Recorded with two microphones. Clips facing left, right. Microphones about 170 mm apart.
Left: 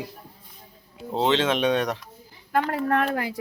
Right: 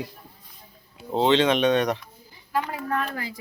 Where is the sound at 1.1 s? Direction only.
Centre (ahead or behind).